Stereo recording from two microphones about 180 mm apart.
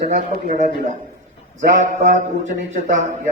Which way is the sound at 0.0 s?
45° right (ahead or behind).